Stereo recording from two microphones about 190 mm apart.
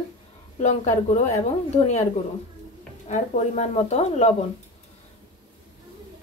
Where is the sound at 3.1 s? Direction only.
35° left (ahead or behind).